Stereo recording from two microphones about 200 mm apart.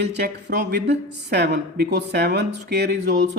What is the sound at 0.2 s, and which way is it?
Speech, 55° right (ahead or behind).